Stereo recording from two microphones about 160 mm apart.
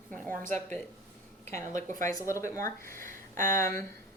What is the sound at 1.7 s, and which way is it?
Speech, 50° right (ahead or behind).